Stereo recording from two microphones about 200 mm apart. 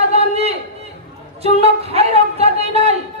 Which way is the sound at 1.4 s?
30° right (ahead or behind).